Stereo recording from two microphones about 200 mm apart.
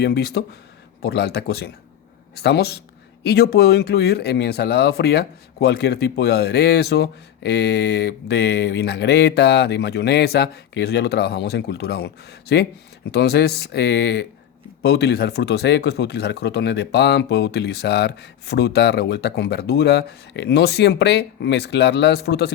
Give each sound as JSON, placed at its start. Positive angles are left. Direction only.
{"t": 0.0, "sound": "speech", "side_deg": 55}